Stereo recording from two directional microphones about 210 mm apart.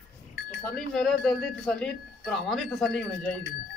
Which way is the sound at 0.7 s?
Centre (ahead or behind).